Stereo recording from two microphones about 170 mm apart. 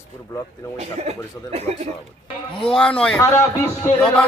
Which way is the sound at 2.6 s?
5° left (ahead or behind).